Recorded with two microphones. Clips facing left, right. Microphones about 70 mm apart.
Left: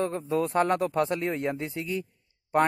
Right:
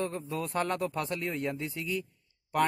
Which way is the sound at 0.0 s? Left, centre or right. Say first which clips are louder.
Left 7 dB; left.